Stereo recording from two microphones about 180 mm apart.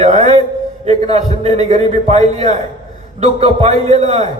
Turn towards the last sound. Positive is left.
turn(degrees=-35)  # may be behind; listen again after turning